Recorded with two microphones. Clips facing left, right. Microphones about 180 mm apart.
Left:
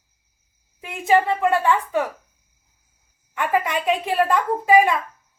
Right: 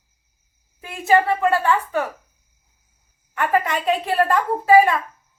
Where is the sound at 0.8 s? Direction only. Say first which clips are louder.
Right 1 dB; 15° left (ahead or behind).